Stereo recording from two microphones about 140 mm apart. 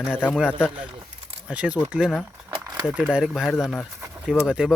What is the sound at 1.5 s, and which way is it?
Speech, 10° right (ahead or behind).